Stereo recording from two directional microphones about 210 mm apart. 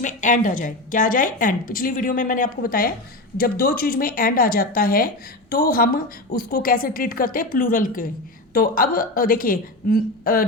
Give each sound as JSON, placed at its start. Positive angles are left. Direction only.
{"t": 0.0, "sound": "a woman's voice", "side_deg": 35}